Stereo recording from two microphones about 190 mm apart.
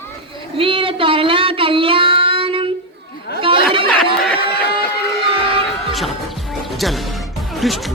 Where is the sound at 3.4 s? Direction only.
25° right (ahead or behind).